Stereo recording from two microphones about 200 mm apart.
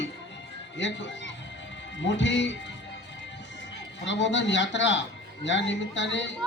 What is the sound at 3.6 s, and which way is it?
A man's voice, 65° left (ahead or behind).